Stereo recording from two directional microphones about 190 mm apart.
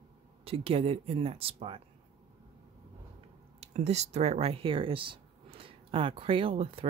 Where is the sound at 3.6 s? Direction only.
35° right (ahead or behind).